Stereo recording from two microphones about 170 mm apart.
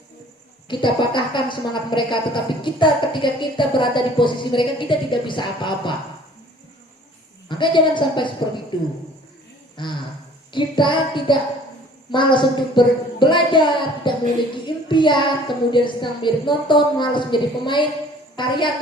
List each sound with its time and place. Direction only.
0.7 s speech: 30° left (ahead or behind)
7.4 s speech: 25° left (ahead or behind)
9.8 s speech: 25° left (ahead or behind)